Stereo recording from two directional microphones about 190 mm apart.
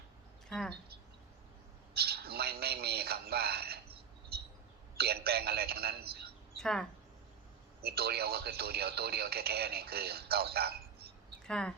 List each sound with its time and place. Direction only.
1.9 s a sound: 55° right (ahead or behind)
4.9 s a man's voice: 55° right (ahead or behind)
6.6 s speech: 5° left (ahead or behind)
7.8 s speech: 55° right (ahead or behind)
11.4 s speech: 5° left (ahead or behind)